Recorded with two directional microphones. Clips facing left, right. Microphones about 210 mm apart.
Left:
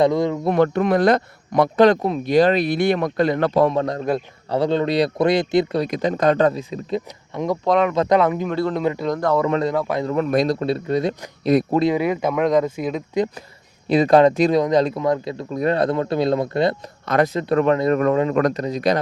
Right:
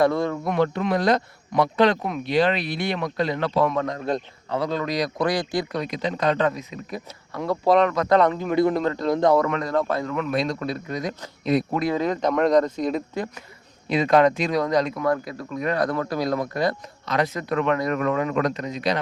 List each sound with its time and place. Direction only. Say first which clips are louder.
0.0 s speech: left 3 dB; 15° left (ahead or behind)
0.5 s speech: left 5 dB; 50° left (ahead or behind)
3.7 s speech: left 4 dB; 30° left (ahead or behind)
5.9 s speech: left 3 dB; 45° left (ahead or behind)
6.5 s speech: left 8 dB; 30° left (ahead or behind)
7.6 s speech: right 1 dB; 5° right (ahead or behind)
8.2 s speech: even; 10° left (ahead or behind)
9.0 s a man's voice: right 4 dB; 10° right (ahead or behind)
9.5 s speech: left 6 dB; 30° left (ahead or behind)
9.7 s speech: left 1 dB; 10° left (ahead or behind)
10.0 s speech: left 5 dB; 35° left (ahead or behind)
11.9 s speech: left 2 dB; 10° left (ahead or behind)
13.9 s speech: left 4 dB; 35° left (ahead or behind)
18.3 s speech: left 5 dB; 45° left (ahead or behind)